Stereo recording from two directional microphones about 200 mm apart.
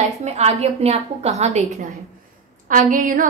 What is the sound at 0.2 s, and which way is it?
A woman's voice, 35° right (ahead or behind).